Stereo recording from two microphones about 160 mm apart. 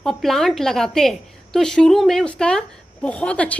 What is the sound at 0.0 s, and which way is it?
A woman's voice, 5° left (ahead or behind).